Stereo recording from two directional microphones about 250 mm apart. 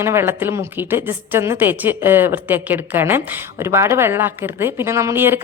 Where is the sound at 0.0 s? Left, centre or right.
Centre.